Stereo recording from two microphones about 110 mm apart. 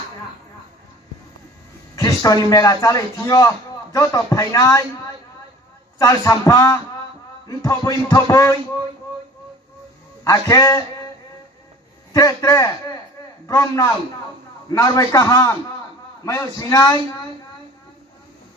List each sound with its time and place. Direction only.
2.0 s a man's voice: 35° left (ahead or behind)
6.0 s a man's voice: 30° left (ahead or behind)
10.2 s a man's voice: 30° left (ahead or behind)
12.1 s a man's voice: 30° left (ahead or behind)